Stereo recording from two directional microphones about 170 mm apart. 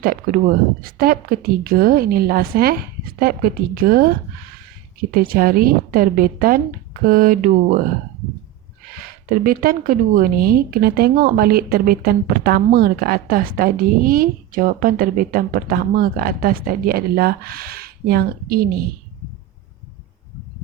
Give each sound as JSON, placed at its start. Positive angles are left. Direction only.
{"t": 0.0, "sound": "speech", "side_deg": -55}
{"t": 5.1, "sound": "speech", "side_deg": -60}
{"t": 9.4, "sound": "speech", "side_deg": -60}